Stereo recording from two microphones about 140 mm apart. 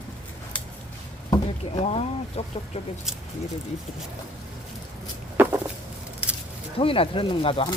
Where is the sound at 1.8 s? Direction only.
50° left (ahead or behind).